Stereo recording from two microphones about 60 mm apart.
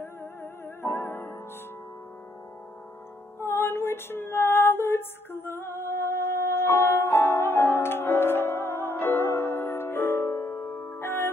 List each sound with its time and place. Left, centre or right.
0.0 s music: left
3.3 s music: left